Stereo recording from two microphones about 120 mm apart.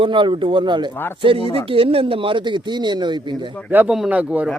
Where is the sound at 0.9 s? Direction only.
15° left (ahead or behind).